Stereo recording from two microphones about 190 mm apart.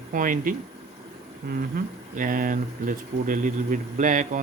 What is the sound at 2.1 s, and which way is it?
Speech, 45° right (ahead or behind).